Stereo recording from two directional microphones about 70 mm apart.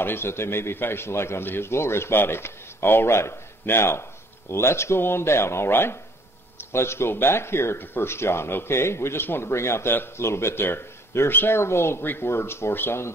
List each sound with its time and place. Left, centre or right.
0.0 s speech: left